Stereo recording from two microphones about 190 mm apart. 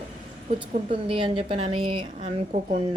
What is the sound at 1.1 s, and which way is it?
Speech, 30° right (ahead or behind).